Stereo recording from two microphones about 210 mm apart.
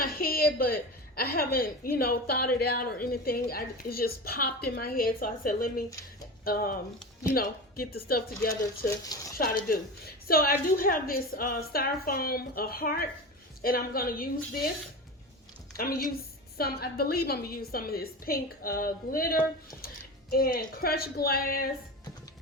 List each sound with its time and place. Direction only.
0.0 s a woman's voice: 45° left (ahead or behind)
9.1 s speech: 15° left (ahead or behind)
9.6 s a woman's voice: 45° left (ahead or behind)
15.7 s a woman's voice: 45° left (ahead or behind)